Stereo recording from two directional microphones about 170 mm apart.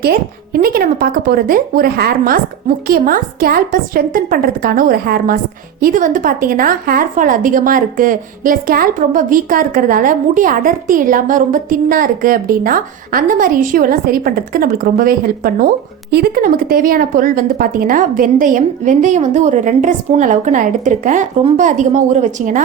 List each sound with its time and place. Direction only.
0.0 s a woman's voice: 65° right (ahead or behind); by 22.6 s 50° right (ahead or behind)